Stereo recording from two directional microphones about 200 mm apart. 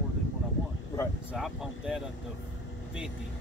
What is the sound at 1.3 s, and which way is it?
Speech, 5° right (ahead or behind).